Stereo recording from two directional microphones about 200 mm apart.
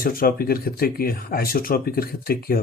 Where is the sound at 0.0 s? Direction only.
45° left (ahead or behind).